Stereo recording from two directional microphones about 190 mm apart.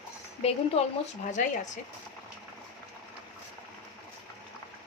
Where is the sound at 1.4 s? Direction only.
45° left (ahead or behind).